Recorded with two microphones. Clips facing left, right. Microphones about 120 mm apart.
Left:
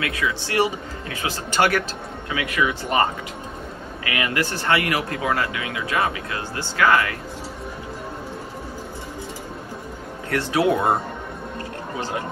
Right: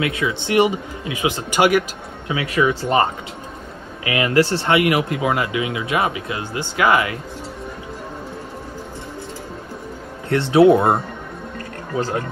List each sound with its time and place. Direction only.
0.0 s speech: 25° right (ahead or behind)
2.3 s speech: 30° right (ahead or behind)
4.0 s speech: 25° right (ahead or behind)
10.3 s speech: 25° right (ahead or behind)